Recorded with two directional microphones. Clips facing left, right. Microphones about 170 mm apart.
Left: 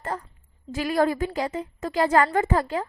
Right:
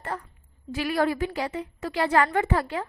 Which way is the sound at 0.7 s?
40° left (ahead or behind).